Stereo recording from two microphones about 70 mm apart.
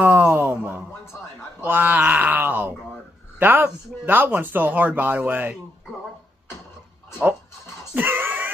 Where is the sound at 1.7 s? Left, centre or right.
Right.